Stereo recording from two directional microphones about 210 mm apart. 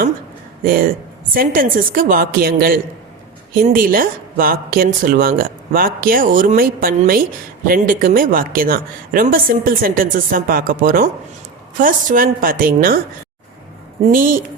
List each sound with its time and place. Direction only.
0.6 s speech: 40° right (ahead or behind)
14.0 s speech: 40° right (ahead or behind)